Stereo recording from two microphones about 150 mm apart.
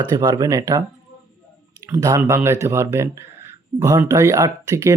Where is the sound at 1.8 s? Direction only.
20° right (ahead or behind).